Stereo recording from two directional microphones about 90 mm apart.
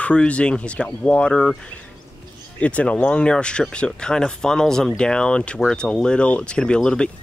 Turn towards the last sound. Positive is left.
turn(degrees=10)  # may be behind; listen again after turning